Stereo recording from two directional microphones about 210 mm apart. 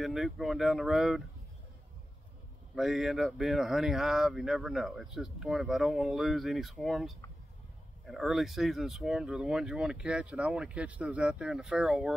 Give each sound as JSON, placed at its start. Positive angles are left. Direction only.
{"t": 0.0, "sound": "speech", "side_deg": 0}
{"t": 2.7, "sound": "speech", "side_deg": 0}